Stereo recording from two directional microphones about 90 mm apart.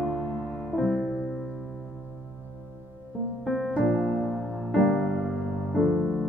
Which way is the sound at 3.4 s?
Centre (ahead or behind).